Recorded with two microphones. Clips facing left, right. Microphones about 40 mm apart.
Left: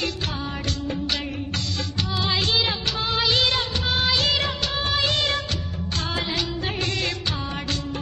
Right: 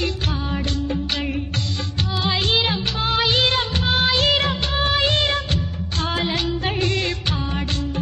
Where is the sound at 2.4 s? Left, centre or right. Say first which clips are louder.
Right 3 dB; right.